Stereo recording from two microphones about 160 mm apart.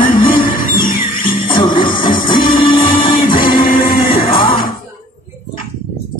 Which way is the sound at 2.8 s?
60° left (ahead or behind).